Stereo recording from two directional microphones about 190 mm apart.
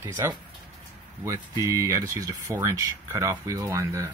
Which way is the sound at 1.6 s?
15° right (ahead or behind).